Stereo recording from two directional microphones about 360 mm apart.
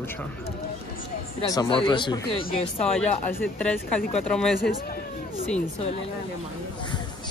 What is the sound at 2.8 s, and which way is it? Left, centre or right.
Speech, centre.